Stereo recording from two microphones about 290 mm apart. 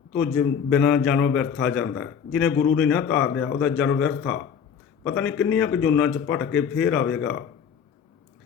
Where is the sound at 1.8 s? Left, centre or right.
Left.